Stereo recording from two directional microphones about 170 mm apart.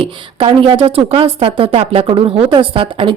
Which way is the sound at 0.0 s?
30° right (ahead or behind).